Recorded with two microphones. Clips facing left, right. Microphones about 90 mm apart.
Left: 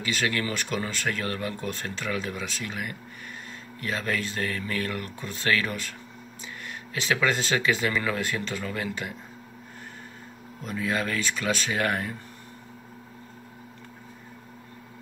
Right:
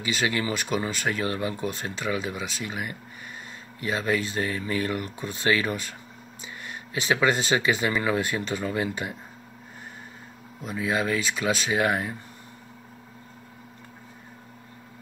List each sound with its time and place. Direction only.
0.0 s speech: 10° right (ahead or behind)
10.6 s speech: 10° right (ahead or behind)